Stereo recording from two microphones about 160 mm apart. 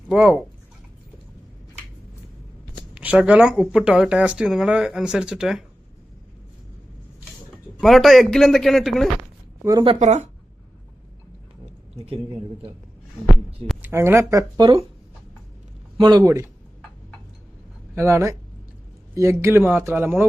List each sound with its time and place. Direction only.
0.1 s speech: 5° right (ahead or behind)
2.9 s speech: 10° right (ahead or behind)
7.8 s speech: centre (ahead or behind)
9.6 s speech: 30° right (ahead or behind)
10.0 s speech: 45° right (ahead or behind)
11.9 s a man's voice: 35° right (ahead or behind)
13.8 s speech: 15° right (ahead or behind)
16.0 s speech: 25° right (ahead or behind)
17.9 s speech: 15° right (ahead or behind)